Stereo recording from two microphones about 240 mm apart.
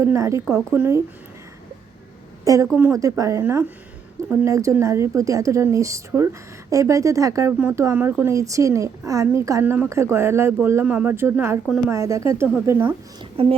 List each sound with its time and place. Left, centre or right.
0.0 s a woman's voice: centre
2.4 s a woman's voice: centre
13.3 s speech: right